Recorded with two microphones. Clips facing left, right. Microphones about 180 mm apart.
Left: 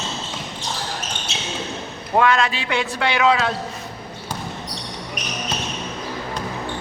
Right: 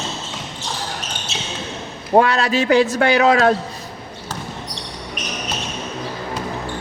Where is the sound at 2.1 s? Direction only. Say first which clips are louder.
Right 3 dB; 35° right (ahead or behind).